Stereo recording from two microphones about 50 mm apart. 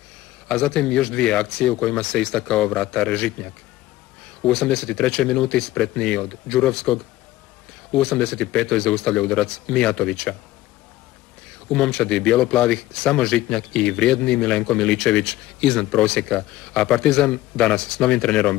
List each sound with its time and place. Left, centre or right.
0.5 s speech: centre
4.6 s speech: left
8.0 s speech: centre
11.7 s speech: centre